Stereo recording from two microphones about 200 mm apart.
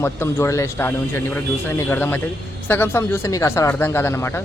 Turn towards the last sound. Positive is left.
turn(degrees=10)  # may be behind; listen again after turning